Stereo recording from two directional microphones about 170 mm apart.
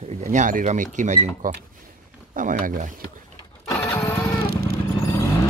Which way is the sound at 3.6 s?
20° left (ahead or behind).